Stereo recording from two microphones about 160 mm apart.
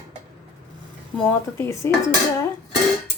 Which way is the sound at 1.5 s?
15° left (ahead or behind).